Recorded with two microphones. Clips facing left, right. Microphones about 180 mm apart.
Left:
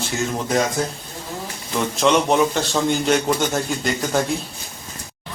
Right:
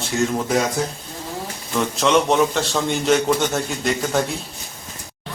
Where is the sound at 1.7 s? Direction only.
Centre (ahead or behind).